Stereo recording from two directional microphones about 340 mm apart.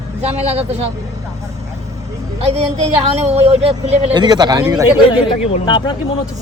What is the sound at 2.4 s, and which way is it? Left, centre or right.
A woman's voice, centre.